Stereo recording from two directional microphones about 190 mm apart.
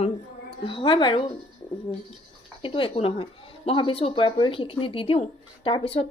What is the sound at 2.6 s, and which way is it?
A woman's voice, 25° left (ahead or behind).